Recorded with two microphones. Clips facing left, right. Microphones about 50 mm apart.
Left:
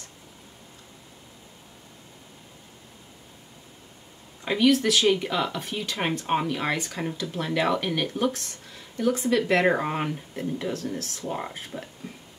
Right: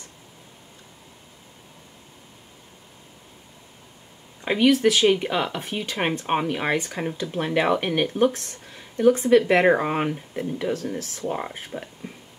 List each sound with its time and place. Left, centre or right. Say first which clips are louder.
4.5 s speech: right 3 dB; right